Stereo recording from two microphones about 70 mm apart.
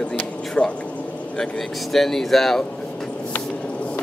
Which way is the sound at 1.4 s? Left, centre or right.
Centre.